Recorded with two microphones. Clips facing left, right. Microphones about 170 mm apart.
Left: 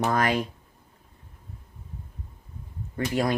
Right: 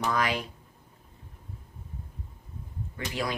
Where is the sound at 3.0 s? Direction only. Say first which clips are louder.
Left 8 dB; 45° left (ahead or behind).